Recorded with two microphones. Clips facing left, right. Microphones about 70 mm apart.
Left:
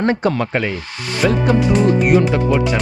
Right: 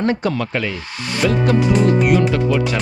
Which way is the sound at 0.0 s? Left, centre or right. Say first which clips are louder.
Left 2 dB; left.